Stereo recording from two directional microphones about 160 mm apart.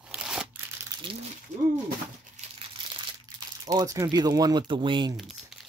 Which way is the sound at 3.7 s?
20° right (ahead or behind).